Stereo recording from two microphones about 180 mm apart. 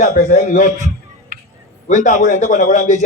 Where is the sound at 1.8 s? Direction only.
40° left (ahead or behind).